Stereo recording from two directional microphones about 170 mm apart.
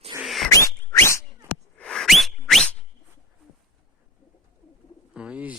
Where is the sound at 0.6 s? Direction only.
15° left (ahead or behind).